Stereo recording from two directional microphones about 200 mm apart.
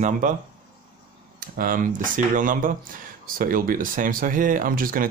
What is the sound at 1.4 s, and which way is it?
Speech, 45° right (ahead or behind).